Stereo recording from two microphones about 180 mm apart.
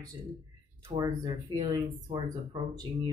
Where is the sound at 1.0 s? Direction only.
20° right (ahead or behind).